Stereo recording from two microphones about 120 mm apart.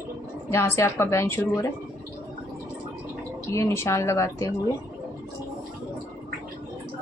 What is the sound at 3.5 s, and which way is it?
A woman's voice, 25° left (ahead or behind).